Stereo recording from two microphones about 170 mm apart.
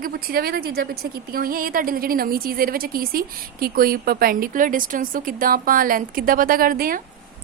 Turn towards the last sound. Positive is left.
turn(degrees=-55)  # may be behind; listen again after turning